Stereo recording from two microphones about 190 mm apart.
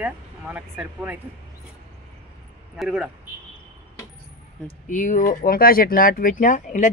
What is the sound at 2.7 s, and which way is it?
Speech, 5° right (ahead or behind).